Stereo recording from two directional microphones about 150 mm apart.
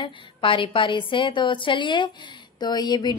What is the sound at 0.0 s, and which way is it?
A woman's voice, 35° left (ahead or behind).